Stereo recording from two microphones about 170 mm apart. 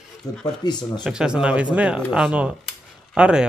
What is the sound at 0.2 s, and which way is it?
Speech, 20° left (ahead or behind).